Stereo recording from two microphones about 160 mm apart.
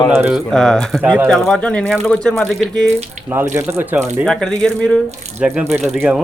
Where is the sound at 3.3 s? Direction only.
15° right (ahead or behind).